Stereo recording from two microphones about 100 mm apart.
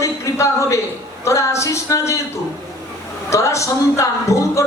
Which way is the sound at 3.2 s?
30° left (ahead or behind).